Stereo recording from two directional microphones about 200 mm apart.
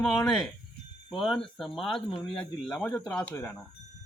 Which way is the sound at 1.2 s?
Centre (ahead or behind).